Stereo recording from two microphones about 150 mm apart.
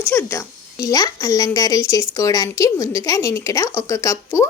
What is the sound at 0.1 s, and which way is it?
Speech, 15° left (ahead or behind).